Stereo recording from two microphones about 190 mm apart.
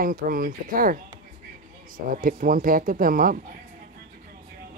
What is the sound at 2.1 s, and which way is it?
Speech, 45° right (ahead or behind).